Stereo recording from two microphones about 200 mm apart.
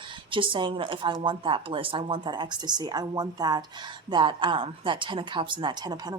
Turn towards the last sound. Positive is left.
turn(degrees=-20)  # may be behind; listen again after turning